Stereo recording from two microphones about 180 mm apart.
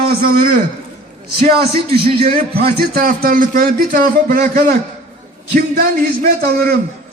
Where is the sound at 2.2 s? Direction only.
60° right (ahead or behind).